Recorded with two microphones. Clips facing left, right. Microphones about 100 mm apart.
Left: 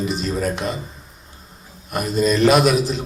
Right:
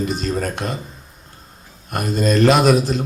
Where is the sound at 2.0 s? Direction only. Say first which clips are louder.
Right 1 dB; 45° right (ahead or behind).